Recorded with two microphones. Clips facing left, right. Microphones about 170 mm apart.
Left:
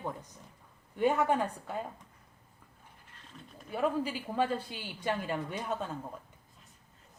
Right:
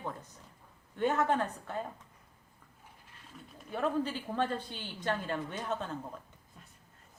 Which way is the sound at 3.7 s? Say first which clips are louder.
Left 1 dB; 10° left (ahead or behind).